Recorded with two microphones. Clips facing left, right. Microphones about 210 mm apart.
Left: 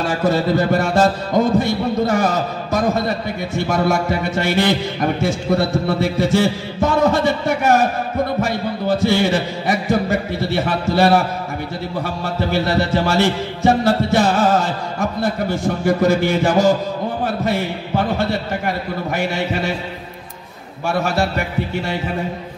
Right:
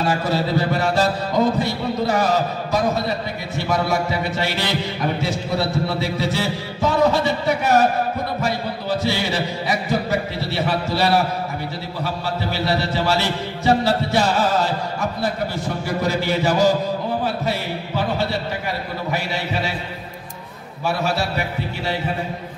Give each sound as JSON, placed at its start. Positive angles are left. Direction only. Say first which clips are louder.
{"t": 0.0, "sound": "music", "louder": "left 3 dB", "side_deg": 50}
{"t": 15.6, "sound": "music", "louder": "left 9 dB", "side_deg": 50}
{"t": 17.2, "sound": "a man's voice", "louder": "left 3 dB", "side_deg": 55}
{"t": 19.0, "sound": "music", "louder": "left 4 dB", "side_deg": 50}
{"t": 20.8, "sound": "music", "louder": "left 3 dB", "side_deg": 50}